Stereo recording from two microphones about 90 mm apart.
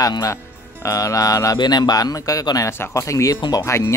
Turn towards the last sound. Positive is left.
turn(degrees=35)  # may be behind; listen again after turning